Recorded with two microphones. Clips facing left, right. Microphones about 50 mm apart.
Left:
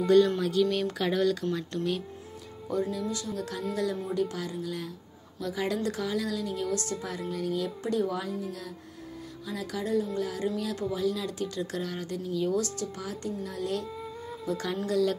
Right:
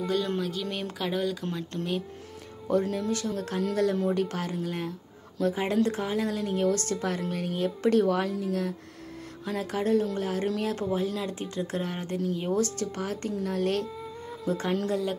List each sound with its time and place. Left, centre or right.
0.0 s speech: centre
0.7 s speech: right
0.9 s speech: centre
1.4 s speech: right
2.7 s speech: right
7.8 s speech: right
9.5 s speech: right
14.4 s speech: right